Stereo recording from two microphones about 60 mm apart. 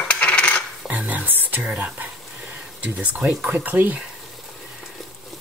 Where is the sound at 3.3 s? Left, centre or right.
Centre.